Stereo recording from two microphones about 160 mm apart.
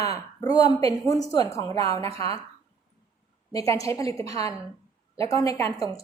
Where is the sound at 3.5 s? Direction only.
20° left (ahead or behind).